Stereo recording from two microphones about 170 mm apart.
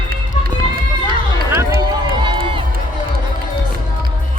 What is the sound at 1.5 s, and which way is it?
Run, 20° right (ahead or behind).